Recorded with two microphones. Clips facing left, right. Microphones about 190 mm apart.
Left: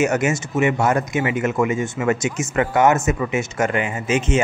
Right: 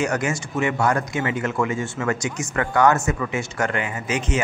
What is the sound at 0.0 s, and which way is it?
Speech, 20° left (ahead or behind).